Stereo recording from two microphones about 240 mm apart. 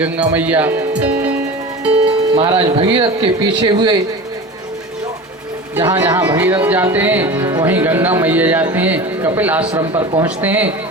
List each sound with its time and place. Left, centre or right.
0.0 s speech: centre
1.9 s speech: right
5.7 s speech: centre